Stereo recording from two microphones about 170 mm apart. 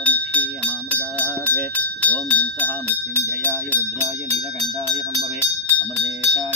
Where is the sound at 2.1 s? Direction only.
10° left (ahead or behind).